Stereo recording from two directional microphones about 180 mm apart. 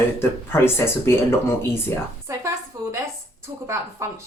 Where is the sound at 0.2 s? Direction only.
15° left (ahead or behind).